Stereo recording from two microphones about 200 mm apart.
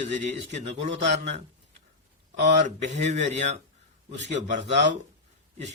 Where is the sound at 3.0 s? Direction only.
35° right (ahead or behind).